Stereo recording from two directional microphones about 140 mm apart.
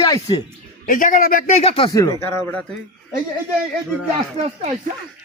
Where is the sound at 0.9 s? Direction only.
70° left (ahead or behind).